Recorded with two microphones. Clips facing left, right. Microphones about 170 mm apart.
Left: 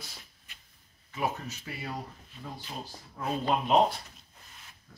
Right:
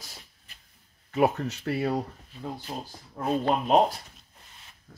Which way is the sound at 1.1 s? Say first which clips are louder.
Right 9 dB; 65° right (ahead or behind).